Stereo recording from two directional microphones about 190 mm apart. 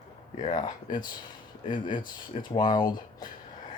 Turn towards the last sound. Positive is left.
turn(degrees=20)  # may be behind; listen again after turning